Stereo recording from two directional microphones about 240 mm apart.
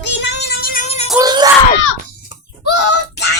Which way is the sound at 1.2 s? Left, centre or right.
Centre.